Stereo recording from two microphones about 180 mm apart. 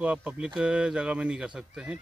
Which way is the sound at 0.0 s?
5° right (ahead or behind).